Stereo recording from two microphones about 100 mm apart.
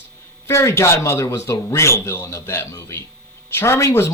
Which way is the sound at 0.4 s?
30° left (ahead or behind).